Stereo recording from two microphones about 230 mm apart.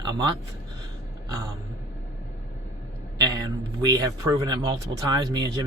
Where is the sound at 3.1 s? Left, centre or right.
Centre.